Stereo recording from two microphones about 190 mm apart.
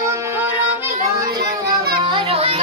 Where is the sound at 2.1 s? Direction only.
30° right (ahead or behind).